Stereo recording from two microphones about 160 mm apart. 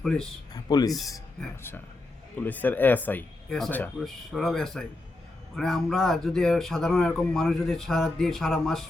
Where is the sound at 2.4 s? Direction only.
10° left (ahead or behind).